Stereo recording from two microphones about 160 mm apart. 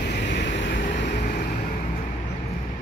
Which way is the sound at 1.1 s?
65° left (ahead or behind).